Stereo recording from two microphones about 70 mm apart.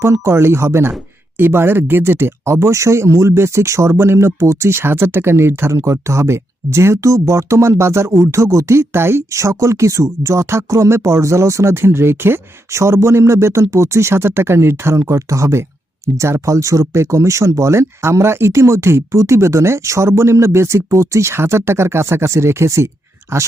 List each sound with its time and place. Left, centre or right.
0.0 s speech: right